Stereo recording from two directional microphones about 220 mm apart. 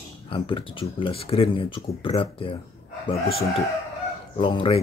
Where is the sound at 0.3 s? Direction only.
25° left (ahead or behind).